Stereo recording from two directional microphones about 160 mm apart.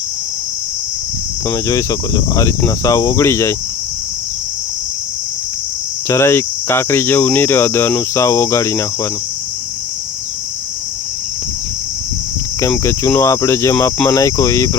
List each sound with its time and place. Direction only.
1.5 s speech: 20° left (ahead or behind)
6.1 s cricket: 15° left (ahead or behind)
12.8 s speech: 15° left (ahead or behind)